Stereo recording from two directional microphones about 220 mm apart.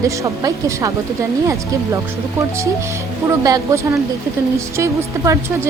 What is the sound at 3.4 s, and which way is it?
Speech, 15° right (ahead or behind).